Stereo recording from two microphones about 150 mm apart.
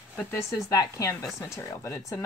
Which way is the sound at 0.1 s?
15° left (ahead or behind).